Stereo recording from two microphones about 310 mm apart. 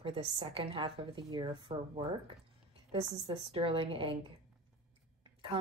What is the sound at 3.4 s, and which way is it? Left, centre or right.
Speech, centre.